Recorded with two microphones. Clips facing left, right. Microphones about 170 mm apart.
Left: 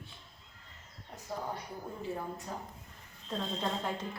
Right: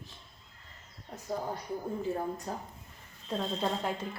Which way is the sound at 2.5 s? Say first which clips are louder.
Right 3 dB; 40° right (ahead or behind).